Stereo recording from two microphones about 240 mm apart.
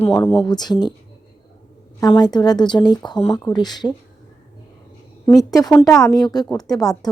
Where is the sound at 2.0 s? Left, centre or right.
Centre.